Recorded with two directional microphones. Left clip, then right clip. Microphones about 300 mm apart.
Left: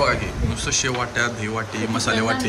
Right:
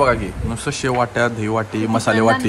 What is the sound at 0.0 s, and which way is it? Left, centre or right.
Speech, centre.